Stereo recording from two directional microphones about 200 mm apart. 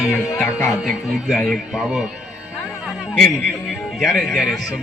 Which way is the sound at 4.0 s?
Centre (ahead or behind).